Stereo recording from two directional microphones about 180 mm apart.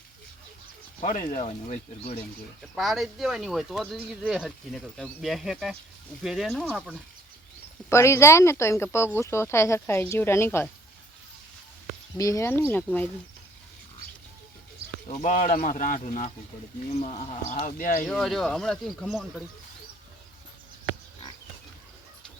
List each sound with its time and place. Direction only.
1.0 s speech: 45° left (ahead or behind)
2.7 s speech: centre (ahead or behind)
7.9 s speech: 15° left (ahead or behind)
12.1 s speech: 20° left (ahead or behind)
15.0 s speech: 45° left (ahead or behind)
18.1 s speech: centre (ahead or behind)